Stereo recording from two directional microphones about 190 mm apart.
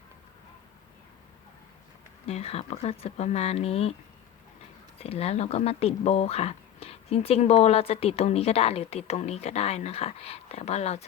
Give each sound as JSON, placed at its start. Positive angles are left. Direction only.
{"t": 2.2, "sound": "speech", "side_deg": 35}
{"t": 4.9, "sound": "speech", "side_deg": 30}